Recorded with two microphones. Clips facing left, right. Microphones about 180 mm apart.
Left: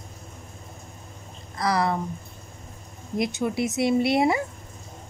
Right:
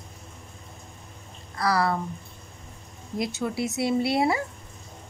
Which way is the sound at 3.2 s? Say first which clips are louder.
Left 3 dB; 20° left (ahead or behind).